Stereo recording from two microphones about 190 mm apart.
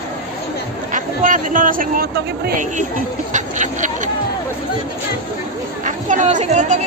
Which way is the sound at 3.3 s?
40° right (ahead or behind).